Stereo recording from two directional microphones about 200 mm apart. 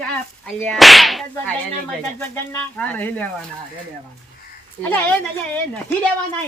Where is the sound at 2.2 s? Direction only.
5° left (ahead or behind).